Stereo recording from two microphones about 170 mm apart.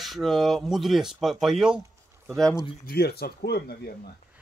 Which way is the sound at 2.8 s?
65° left (ahead or behind).